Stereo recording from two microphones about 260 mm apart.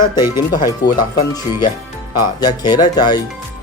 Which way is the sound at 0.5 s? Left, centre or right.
Centre.